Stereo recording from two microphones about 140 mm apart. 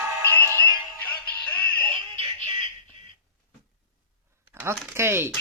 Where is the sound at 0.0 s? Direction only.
20° right (ahead or behind).